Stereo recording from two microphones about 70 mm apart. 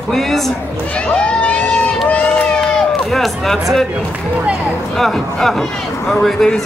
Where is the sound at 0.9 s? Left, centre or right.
Centre.